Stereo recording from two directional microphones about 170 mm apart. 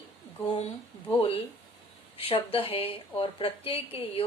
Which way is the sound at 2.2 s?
35° left (ahead or behind).